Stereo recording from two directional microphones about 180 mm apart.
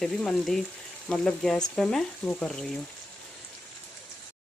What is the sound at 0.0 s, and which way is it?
Speech, centre (ahead or behind).